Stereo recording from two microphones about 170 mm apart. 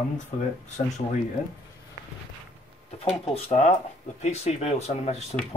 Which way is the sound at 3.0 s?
40° left (ahead or behind).